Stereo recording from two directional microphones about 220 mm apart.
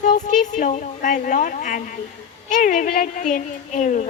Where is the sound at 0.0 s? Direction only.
35° left (ahead or behind).